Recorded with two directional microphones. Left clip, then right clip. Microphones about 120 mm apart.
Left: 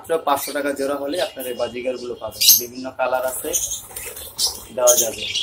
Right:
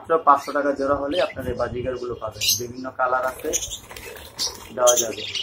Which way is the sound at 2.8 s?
30° left (ahead or behind).